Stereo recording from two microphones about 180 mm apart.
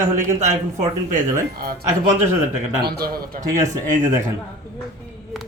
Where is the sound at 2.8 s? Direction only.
60° right (ahead or behind).